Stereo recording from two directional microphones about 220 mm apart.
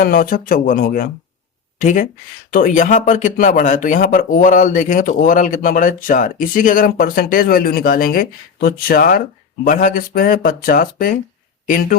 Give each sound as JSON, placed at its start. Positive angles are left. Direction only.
{"t": 0.0, "sound": "speech", "side_deg": 40}